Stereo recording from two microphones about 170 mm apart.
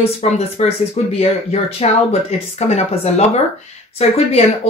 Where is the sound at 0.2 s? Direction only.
40° left (ahead or behind).